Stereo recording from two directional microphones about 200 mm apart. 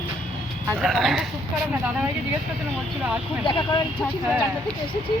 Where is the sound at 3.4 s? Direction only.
25° left (ahead or behind).